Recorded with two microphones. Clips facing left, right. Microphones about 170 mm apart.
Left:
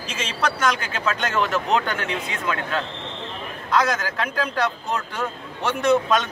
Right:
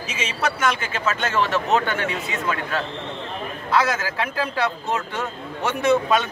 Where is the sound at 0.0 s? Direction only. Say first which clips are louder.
Even; 10° right (ahead or behind).